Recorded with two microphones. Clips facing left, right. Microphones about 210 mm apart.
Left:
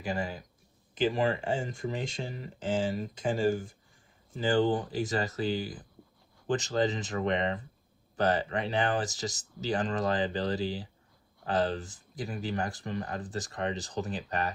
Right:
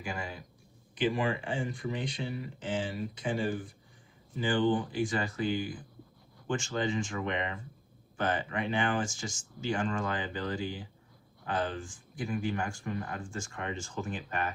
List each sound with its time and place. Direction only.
0.0 s speech: 35° left (ahead or behind)